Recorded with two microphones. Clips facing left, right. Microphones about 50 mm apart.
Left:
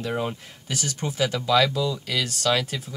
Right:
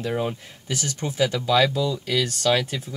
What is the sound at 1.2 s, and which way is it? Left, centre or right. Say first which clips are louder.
Speech: right 3 dB; centre.